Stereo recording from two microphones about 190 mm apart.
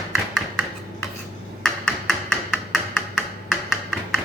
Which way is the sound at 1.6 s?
Centre (ahead or behind).